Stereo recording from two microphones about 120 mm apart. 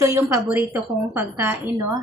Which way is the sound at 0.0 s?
25° right (ahead or behind).